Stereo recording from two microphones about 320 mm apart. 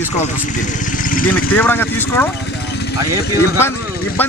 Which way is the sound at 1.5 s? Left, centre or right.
Centre.